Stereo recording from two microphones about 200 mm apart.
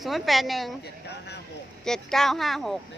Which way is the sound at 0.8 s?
55° left (ahead or behind).